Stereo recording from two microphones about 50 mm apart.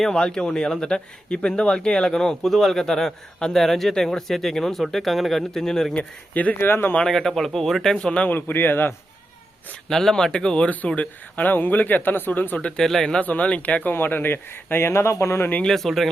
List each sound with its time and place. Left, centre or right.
0.1 s speech: centre
2.4 s speech: centre
5.9 s speech: left
6.6 s speech: left
7.0 s speech: centre
7.9 s speech: left
8.3 s speech: left
9.9 s speech: centre
10.7 s speech: left
12.5 s speech: left
12.8 s speech: centre
13.2 s speech: left
13.9 s speech: left
15.6 s speech: centre